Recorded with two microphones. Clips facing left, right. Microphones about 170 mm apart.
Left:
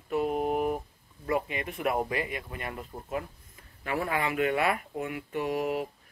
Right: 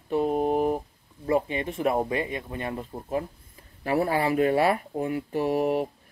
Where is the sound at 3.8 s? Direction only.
35° right (ahead or behind).